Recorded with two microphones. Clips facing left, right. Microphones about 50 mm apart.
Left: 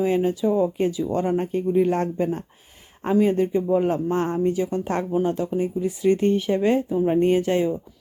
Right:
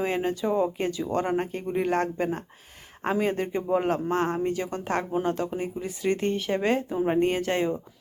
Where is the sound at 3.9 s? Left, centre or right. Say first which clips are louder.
Left 2 dB; right.